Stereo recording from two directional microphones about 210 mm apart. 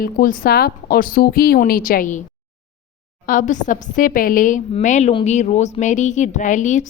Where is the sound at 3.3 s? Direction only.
40° left (ahead or behind).